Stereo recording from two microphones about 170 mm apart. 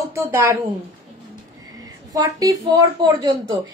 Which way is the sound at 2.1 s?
20° right (ahead or behind).